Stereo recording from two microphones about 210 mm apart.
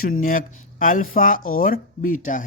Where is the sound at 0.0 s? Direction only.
40° left (ahead or behind).